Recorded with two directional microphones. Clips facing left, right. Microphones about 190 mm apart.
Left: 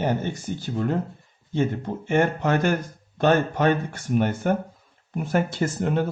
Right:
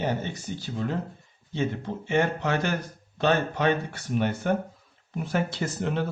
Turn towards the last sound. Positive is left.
turn(degrees=50)  # may be behind; listen again after turning